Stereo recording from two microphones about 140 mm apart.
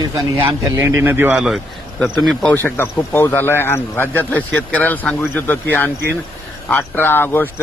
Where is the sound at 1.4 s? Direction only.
Centre (ahead or behind).